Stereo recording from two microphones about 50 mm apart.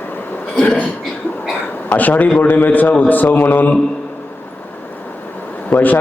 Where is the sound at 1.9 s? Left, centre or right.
Left.